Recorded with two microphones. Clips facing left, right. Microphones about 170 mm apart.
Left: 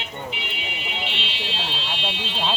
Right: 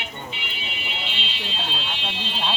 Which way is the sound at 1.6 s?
75° left (ahead or behind).